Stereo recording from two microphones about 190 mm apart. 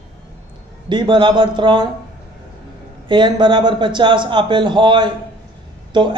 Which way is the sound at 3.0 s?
25° right (ahead or behind).